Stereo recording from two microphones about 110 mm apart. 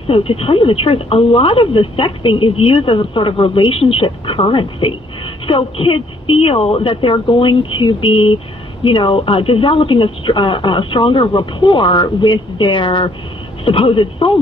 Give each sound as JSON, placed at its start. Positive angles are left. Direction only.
{"t": 0.1, "sound": "speech", "side_deg": 60}